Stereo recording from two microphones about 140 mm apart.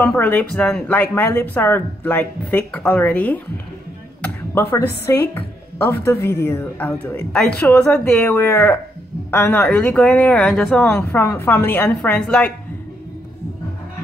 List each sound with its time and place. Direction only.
0.0 s a woman's voice: 10° left (ahead or behind)
11.1 s a woman's voice: 20° left (ahead or behind)